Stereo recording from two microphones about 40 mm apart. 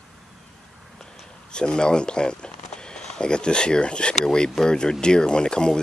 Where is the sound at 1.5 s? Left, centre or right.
Left.